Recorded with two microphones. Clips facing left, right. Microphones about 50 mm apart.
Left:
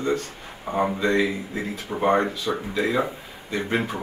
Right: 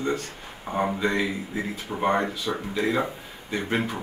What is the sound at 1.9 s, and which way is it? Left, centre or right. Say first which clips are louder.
Speech: left 3 dB; centre.